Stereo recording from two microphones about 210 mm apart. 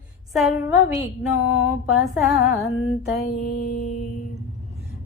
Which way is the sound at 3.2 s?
45° left (ahead or behind).